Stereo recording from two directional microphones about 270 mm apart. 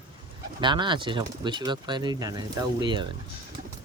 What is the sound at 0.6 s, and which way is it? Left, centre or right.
Speech, centre.